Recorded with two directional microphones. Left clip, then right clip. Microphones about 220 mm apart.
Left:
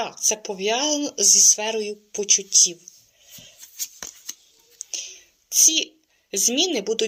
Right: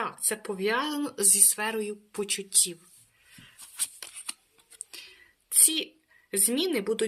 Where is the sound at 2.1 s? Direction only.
85° right.